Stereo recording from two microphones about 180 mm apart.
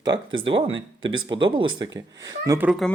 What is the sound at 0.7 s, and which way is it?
Speech, 90° right.